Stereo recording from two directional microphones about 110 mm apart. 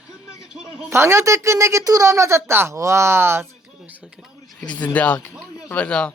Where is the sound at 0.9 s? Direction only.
25° right (ahead or behind).